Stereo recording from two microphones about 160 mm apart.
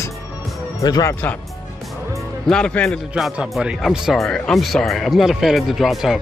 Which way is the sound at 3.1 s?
5° right (ahead or behind).